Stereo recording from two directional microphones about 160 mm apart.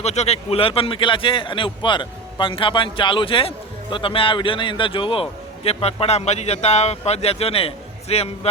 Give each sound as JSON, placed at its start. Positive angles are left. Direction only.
{"t": 0.0, "sound": "a man's voice", "side_deg": 45}